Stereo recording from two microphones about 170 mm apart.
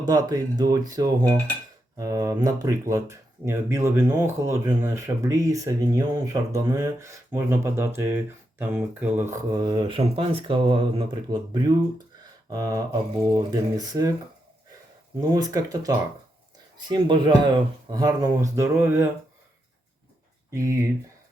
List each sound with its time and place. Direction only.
0.0 s speech: 20° right (ahead or behind)
15.3 s speech: 20° right (ahead or behind)
20.5 s speech: 15° right (ahead or behind)